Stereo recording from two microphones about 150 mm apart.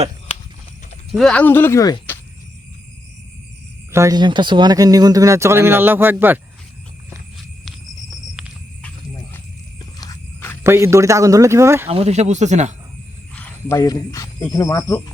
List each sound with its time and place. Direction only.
1.1 s speech: 5° left (ahead or behind); by 2.1 s 20° left (ahead or behind)
3.9 s speech: 25° right (ahead or behind)
10.6 s speech: 15° right (ahead or behind)
11.9 s speech: 45° right (ahead or behind)
13.3 s speech: 15° left (ahead or behind)